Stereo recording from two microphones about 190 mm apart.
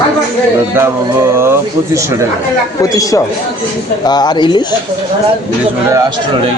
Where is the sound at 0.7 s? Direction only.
10° right (ahead or behind).